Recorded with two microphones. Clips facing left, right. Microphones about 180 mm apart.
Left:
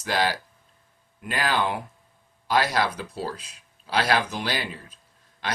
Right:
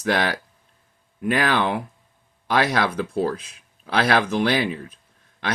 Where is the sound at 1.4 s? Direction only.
60° right (ahead or behind).